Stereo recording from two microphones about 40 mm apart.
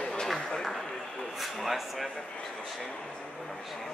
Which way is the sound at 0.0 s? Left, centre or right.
Centre.